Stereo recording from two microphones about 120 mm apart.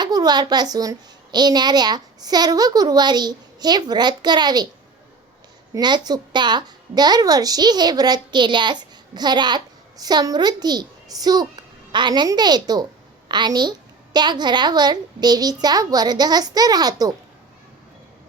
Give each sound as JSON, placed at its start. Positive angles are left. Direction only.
{"t": 0.0, "sound": "a woman's voice", "side_deg": -35}
{"t": 5.7, "sound": "a woman's voice", "side_deg": -35}